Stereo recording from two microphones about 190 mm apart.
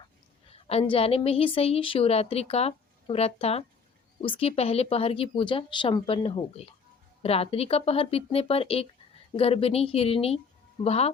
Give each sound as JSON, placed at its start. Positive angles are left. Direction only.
{"t": 0.4, "sound": "a woman's voice", "side_deg": 30}